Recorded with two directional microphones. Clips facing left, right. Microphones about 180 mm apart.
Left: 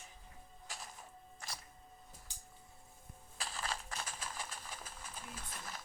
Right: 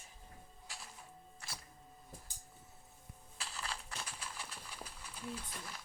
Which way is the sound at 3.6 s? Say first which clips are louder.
Left 3 dB; 45° left (ahead or behind).